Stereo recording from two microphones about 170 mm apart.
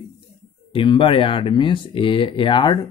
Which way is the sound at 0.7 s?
30° left (ahead or behind).